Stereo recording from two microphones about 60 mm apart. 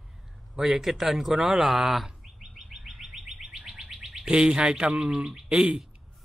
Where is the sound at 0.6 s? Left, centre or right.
Centre.